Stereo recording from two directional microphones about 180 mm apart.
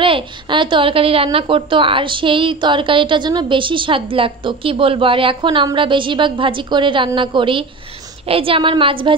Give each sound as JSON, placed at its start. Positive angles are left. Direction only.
{"t": 0.0, "sound": "speech", "side_deg": -30}